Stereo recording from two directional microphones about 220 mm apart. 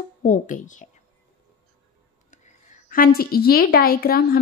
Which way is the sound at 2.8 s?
40° left (ahead or behind).